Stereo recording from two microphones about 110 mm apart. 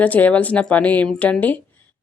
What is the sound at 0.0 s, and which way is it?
A woman's voice, 15° left (ahead or behind).